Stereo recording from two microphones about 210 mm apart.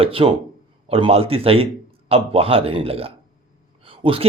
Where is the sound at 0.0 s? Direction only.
25° right (ahead or behind).